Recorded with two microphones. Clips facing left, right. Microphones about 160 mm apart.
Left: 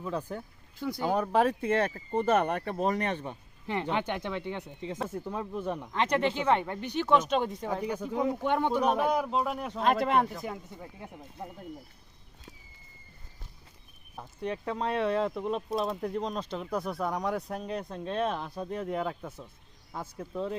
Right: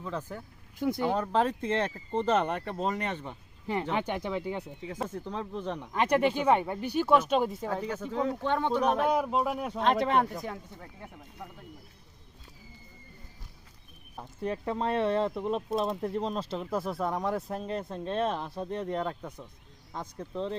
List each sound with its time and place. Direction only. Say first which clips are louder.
0.0 s speech: left 2 dB; 15° left (ahead or behind)
3.9 s speech: right 1 dB; 5° right (ahead or behind)
5.0 s speech: right 1 dB; 10° left (ahead or behind)
5.9 s speech: right 3 dB; 10° right (ahead or behind)
7.7 s speech: left 1 dB; 15° left (ahead or behind)
9.1 s speech: right 1 dB; centre (ahead or behind)
14.2 s speech: right 1 dB; 5° right (ahead or behind)